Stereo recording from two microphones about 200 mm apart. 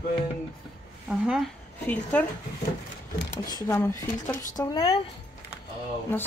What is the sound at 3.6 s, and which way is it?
Speech, 15° left (ahead or behind).